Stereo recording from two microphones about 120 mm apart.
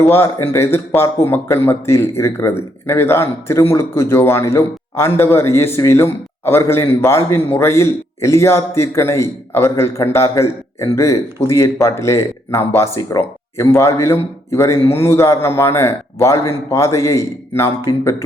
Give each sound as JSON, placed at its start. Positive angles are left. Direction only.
{"t": 0.1, "sound": "a man's voice", "side_deg": 20}